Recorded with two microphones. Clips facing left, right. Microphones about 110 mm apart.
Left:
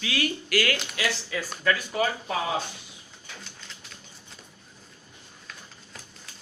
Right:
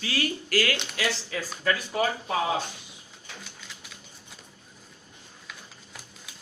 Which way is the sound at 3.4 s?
5° right (ahead or behind).